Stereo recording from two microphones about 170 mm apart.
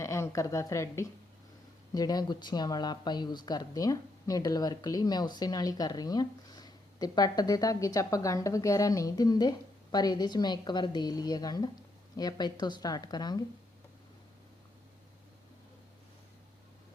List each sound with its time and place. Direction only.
0.0 s a woman's voice: 15° left (ahead or behind)